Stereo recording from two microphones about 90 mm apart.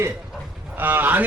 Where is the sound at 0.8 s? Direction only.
20° right (ahead or behind).